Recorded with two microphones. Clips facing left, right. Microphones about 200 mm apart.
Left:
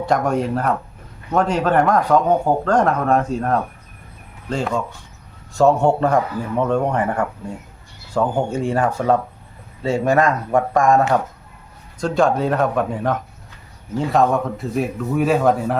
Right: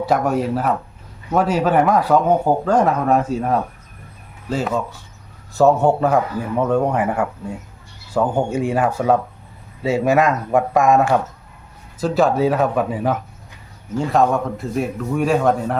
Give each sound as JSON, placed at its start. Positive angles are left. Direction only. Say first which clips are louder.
{"t": 0.0, "sound": "a man's voice", "louder": "right 1 dB", "side_deg": -5}